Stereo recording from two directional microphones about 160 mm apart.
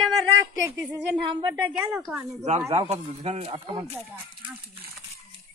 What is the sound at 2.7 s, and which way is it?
Speech, 40° right (ahead or behind).